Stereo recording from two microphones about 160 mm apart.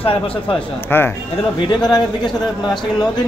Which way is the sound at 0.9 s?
15° left (ahead or behind).